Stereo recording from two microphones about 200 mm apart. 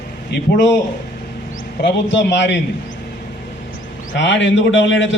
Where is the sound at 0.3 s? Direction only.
60° left (ahead or behind).